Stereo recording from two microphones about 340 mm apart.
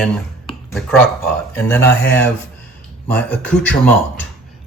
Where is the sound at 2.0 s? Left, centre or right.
Left.